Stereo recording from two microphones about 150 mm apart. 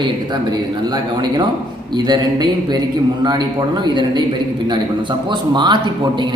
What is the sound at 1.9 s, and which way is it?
A man's voice, 30° right (ahead or behind).